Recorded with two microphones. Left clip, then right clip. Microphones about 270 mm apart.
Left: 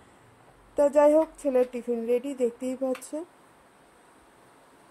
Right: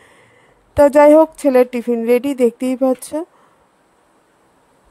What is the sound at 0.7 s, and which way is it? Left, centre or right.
Speech, right.